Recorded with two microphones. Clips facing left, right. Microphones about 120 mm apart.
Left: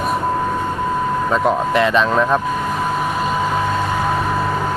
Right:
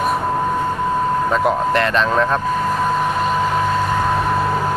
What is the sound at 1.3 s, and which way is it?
Speech, centre (ahead or behind).